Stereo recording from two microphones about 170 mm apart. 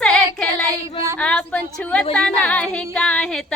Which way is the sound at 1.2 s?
5° left (ahead or behind).